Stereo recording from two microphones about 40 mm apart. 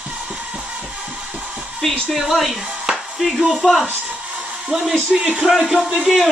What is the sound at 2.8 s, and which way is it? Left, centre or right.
Music, centre.